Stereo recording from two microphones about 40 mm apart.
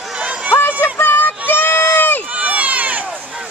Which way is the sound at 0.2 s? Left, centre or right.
Right.